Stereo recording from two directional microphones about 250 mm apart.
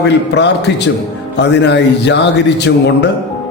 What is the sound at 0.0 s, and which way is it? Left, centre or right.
A man's voice, left.